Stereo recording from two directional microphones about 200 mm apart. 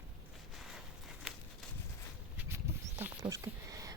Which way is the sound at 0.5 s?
Centre (ahead or behind).